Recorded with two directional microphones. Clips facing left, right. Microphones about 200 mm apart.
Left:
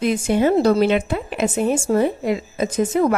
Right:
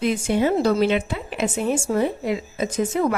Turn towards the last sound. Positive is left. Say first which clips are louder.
# left 3 dB
turn(degrees=45)  # may be behind; listen again after turning